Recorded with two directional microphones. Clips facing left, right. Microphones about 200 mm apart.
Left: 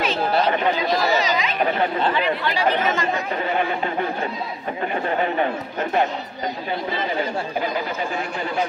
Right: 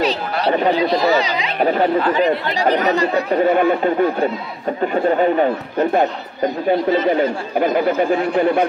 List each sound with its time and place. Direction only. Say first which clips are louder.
0.5 s speech: right 5 dB; 35° right (ahead or behind)
5.4 s speech: right 6 dB; 40° right (ahead or behind)
7.6 s speech: right 9 dB; 55° right (ahead or behind)